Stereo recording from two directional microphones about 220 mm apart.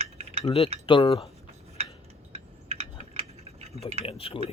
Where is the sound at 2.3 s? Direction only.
30° right (ahead or behind).